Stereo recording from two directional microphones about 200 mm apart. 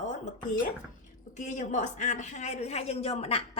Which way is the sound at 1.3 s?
35° left (ahead or behind).